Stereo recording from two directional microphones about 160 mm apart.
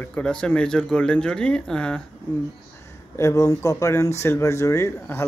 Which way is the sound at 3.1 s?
20° left (ahead or behind).